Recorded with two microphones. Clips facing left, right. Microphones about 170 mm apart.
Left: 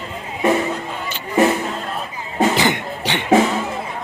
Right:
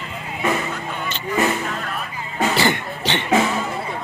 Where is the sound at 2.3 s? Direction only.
15° left (ahead or behind).